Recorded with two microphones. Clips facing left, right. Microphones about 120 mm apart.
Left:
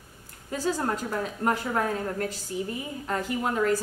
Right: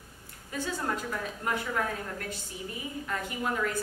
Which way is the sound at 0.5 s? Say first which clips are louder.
Left 5 dB; 35° left (ahead or behind).